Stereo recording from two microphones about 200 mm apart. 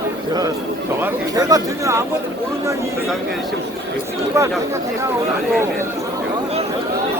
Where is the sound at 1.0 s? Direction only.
20° right (ahead or behind).